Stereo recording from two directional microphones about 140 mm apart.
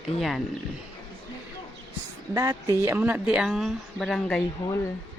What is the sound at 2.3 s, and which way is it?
A woman's voice, 20° right (ahead or behind).